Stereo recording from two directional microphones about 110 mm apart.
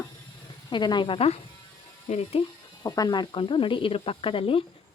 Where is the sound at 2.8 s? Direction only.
35° left (ahead or behind); by 4.6 s 55° left (ahead or behind).